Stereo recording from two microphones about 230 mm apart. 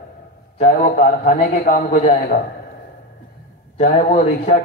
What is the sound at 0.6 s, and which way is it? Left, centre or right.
Speech, left.